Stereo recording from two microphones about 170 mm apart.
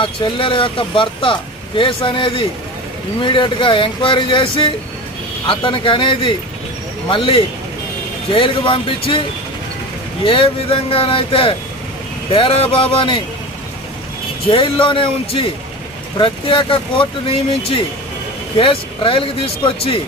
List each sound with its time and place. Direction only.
0.0 s speech: 30° left (ahead or behind)
10.2 s speech: 30° left (ahead or behind)
14.5 s speech: 30° left (ahead or behind)